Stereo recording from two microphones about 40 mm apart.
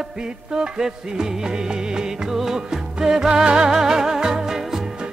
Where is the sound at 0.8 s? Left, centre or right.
Centre.